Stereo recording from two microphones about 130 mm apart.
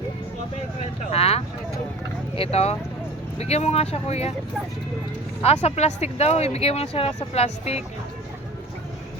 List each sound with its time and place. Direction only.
1.1 s vehicle: 50° left (ahead or behind)
2.3 s speech: 50° left (ahead or behind)
5.6 s speech: 55° left (ahead or behind)